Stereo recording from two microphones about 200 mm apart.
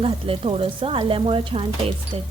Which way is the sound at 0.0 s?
25° right (ahead or behind).